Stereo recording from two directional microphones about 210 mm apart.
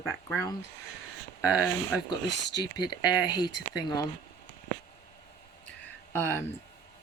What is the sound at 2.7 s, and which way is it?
Speech, 20° left (ahead or behind).